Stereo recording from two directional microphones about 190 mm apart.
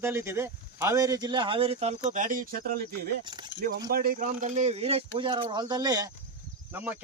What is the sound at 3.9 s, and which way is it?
Speech, 50° right (ahead or behind).